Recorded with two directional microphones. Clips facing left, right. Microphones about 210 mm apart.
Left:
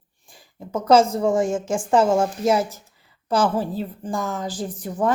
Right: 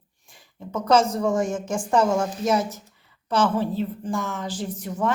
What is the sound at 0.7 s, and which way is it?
A woman's voice, 30° left (ahead or behind).